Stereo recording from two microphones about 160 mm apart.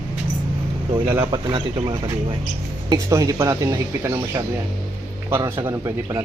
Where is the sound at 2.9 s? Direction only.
20° right (ahead or behind).